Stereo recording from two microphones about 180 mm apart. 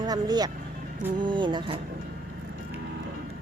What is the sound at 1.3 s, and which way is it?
Music, 25° right (ahead or behind).